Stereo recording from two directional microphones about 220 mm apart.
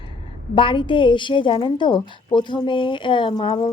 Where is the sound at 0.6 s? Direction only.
25° left (ahead or behind).